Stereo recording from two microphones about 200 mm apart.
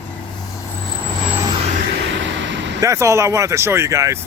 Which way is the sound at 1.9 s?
65° right (ahead or behind).